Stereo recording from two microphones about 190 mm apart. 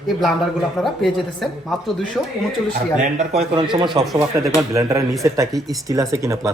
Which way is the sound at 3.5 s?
25° right (ahead or behind).